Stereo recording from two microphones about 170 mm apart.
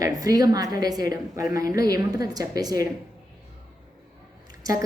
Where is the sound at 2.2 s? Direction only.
20° right (ahead or behind).